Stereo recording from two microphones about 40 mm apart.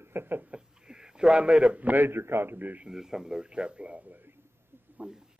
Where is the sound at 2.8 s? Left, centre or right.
Centre.